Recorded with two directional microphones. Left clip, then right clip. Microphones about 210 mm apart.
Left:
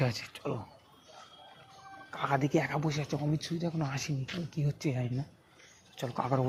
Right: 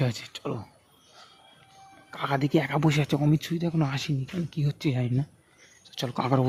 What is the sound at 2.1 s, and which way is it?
Speech, 25° right (ahead or behind).